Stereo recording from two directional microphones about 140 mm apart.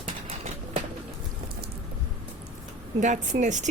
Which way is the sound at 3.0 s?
60° right (ahead or behind).